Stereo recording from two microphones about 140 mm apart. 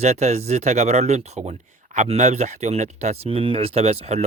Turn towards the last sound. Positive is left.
turn(degrees=-50)  # may be behind; listen again after turning